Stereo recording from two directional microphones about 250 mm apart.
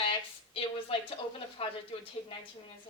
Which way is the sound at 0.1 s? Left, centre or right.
Left.